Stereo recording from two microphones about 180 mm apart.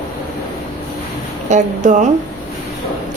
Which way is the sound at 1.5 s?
40° right (ahead or behind).